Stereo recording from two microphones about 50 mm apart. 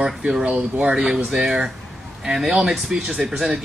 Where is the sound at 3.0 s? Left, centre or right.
Centre.